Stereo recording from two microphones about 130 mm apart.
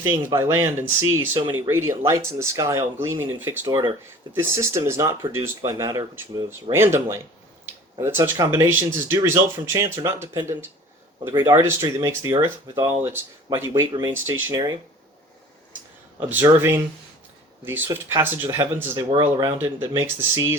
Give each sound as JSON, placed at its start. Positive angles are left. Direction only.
{"t": 0.3, "sound": "speech", "side_deg": -20}
{"t": 3.7, "sound": "speech", "side_deg": -35}
{"t": 4.3, "sound": "speech", "side_deg": -20}
{"t": 16.3, "sound": "speech", "side_deg": -15}